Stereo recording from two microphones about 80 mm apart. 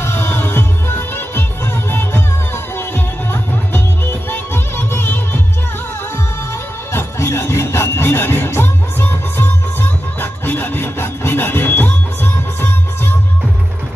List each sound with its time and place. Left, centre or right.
0.0 s music: left
6.9 s music: left